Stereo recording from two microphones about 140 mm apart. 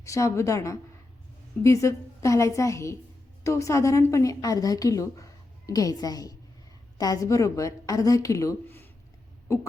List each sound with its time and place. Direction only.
0.0 s a woman's voice: 20° left (ahead or behind)